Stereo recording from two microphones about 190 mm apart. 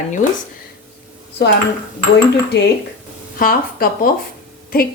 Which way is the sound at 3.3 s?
50° left (ahead or behind).